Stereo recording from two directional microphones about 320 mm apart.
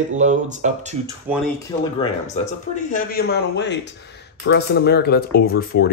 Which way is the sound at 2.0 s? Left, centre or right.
Centre.